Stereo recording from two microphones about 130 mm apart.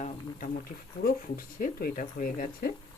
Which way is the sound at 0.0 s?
90° left.